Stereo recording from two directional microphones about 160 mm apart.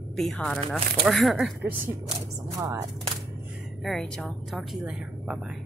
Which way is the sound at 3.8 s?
Centre (ahead or behind).